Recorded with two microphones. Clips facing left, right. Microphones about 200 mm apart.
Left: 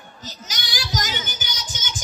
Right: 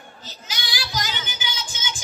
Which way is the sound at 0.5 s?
45° left (ahead or behind).